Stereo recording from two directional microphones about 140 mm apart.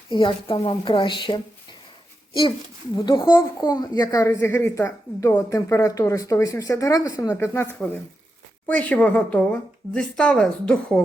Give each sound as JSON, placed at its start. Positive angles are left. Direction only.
{"t": 0.1, "sound": "speech", "side_deg": 35}
{"t": 2.9, "sound": "a woman's voice", "side_deg": 35}